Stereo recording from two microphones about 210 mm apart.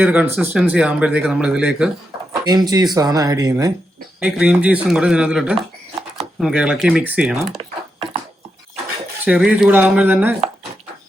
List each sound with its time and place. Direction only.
0.0 s speech: 5° right (ahead or behind)
2.4 s speech: 20° right (ahead or behind)
4.2 s speech: 5° right (ahead or behind)
9.2 s speech: 5° right (ahead or behind)